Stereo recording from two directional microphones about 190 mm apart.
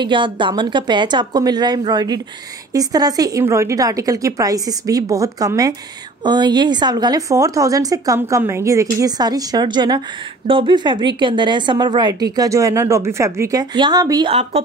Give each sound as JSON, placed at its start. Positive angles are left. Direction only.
{"t": 0.0, "sound": "a woman's voice", "side_deg": -25}
{"t": 14.3, "sound": "a woman's voice", "side_deg": -35}